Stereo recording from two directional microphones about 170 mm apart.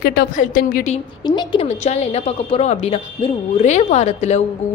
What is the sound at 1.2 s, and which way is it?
Speech, 25° left (ahead or behind).